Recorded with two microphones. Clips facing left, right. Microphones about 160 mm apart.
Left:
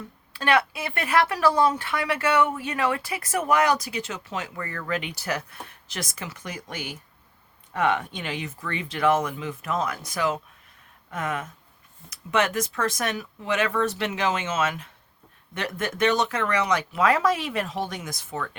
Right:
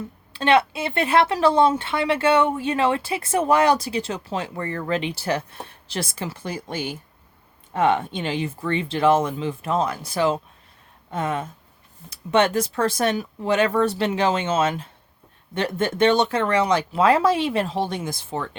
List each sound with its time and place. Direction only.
0.3 s speech: 25° right (ahead or behind)